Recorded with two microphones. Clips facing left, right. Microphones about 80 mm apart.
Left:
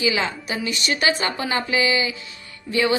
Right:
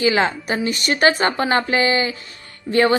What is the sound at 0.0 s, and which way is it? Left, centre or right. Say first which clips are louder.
A woman's voice: right 5 dB; right.